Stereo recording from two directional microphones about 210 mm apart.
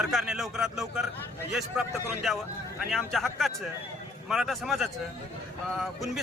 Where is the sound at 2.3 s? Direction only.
Centre (ahead or behind).